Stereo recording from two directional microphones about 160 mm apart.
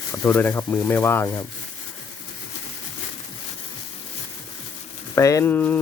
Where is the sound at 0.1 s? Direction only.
10° left (ahead or behind).